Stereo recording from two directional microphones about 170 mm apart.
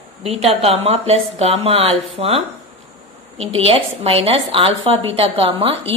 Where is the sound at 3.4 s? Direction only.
35° right (ahead or behind).